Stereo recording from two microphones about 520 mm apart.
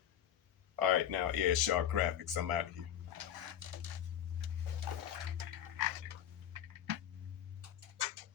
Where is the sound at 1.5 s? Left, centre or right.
Right.